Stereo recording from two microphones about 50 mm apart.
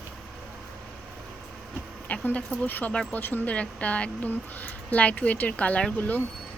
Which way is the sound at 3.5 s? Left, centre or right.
Left.